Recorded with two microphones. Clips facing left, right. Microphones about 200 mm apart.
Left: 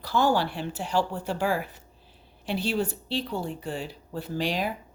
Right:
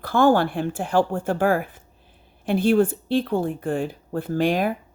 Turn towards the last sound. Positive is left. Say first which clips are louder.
# right 7 dB
turn(degrees=-50)  # may be behind; listen again after turning